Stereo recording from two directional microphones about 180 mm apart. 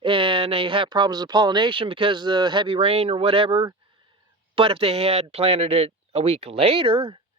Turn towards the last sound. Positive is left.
turn(degrees=-30)  # may be behind; listen again after turning